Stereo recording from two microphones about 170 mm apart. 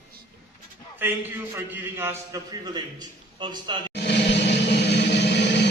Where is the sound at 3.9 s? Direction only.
75° left (ahead or behind).